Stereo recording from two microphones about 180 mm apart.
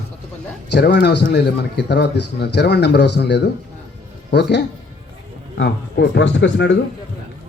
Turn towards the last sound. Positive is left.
turn(degrees=80)